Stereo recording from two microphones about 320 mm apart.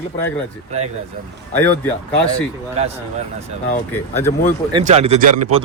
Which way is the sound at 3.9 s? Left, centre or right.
Centre.